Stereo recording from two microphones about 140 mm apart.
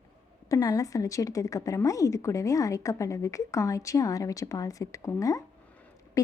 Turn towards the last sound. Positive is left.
turn(degrees=25)  # may be behind; listen again after turning